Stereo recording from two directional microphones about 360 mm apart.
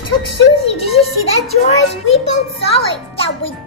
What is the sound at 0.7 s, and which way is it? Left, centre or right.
Speech, centre.